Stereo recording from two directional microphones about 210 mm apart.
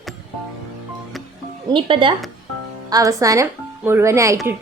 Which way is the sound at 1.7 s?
25° right (ahead or behind).